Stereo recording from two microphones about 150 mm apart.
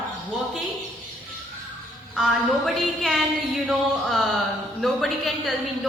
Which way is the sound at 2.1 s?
Centre (ahead or behind).